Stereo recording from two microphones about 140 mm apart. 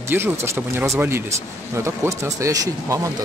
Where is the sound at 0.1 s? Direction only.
20° right (ahead or behind).